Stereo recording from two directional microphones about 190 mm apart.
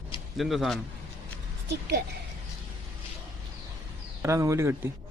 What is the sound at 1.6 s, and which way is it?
Speech, 60° right (ahead or behind).